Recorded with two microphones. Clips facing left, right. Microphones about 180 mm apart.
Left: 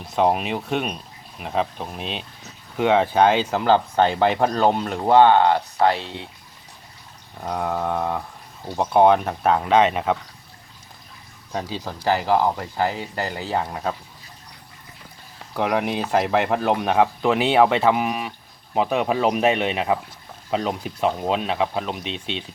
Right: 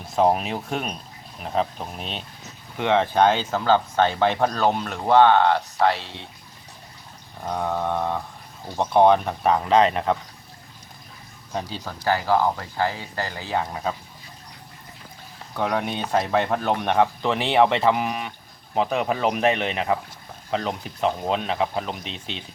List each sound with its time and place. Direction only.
0.1 s speech: centre (ahead or behind)
4.4 s speech: 20° left (ahead or behind)
5.0 s speech: 15° left (ahead or behind)
7.4 s speech: 5° left (ahead or behind)
11.9 s speech: 15° left (ahead or behind)
15.5 s speech: 5° left (ahead or behind)